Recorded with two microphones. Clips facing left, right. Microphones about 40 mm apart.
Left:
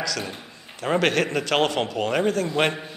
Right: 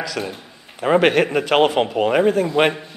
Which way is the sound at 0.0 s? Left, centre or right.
Centre.